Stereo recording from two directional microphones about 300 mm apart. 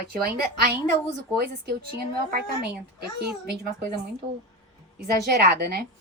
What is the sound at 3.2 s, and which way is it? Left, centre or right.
Speech, right.